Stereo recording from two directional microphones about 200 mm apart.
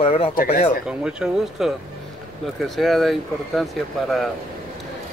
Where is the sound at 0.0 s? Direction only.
30° left (ahead or behind).